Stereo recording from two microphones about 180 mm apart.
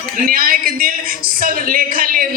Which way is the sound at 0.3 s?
55° right (ahead or behind).